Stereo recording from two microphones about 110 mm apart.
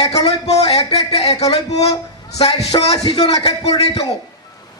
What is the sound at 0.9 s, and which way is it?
Speech, 70° left (ahead or behind).